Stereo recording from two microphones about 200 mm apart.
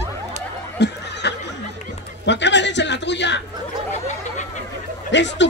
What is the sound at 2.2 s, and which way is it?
A man's voice, 60° left (ahead or behind).